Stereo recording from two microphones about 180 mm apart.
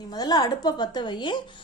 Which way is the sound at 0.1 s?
20° left (ahead or behind).